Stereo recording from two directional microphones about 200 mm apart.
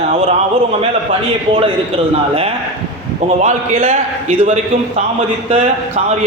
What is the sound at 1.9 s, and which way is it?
Speech, 30° right (ahead or behind).